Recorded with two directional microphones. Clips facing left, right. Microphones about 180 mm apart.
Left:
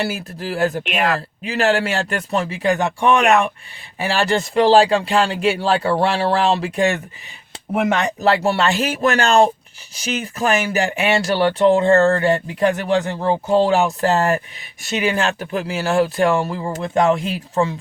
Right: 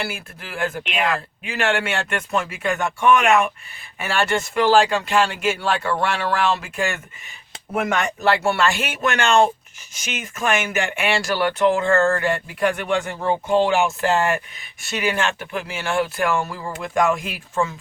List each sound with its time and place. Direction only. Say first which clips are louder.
0.0 s speech: left 6 dB; 35° left (ahead or behind)
8.2 s speech: left 2 dB; 35° left (ahead or behind)
13.1 s speech: left 3 dB; 25° left (ahead or behind)
14.8 s speech: left 3 dB; 25° left (ahead or behind)